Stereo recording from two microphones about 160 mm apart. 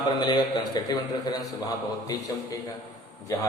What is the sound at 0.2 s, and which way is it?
A man's voice, 25° left (ahead or behind).